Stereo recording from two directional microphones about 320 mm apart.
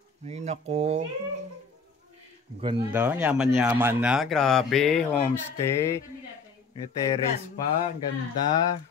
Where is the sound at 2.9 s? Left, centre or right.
Centre.